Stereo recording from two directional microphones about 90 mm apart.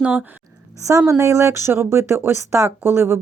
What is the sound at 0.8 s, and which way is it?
Speech, 35° right (ahead or behind).